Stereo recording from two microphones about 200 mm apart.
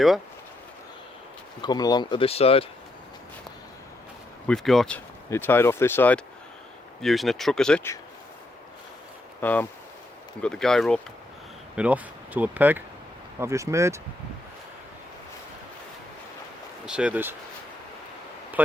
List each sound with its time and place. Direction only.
1.6 s speech: 20° left (ahead or behind)
4.4 s speech: centre (ahead or behind)
9.4 s speech: 10° left (ahead or behind); by 14.0 s 15° right (ahead or behind)
16.8 s speech: 5° right (ahead or behind)